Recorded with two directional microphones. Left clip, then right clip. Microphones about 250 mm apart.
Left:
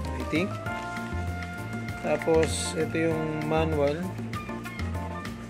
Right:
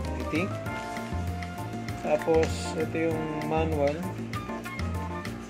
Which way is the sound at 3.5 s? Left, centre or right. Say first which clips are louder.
Left 2 dB; left.